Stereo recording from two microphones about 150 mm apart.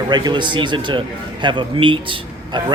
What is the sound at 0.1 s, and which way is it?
A man's voice, 30° right (ahead or behind).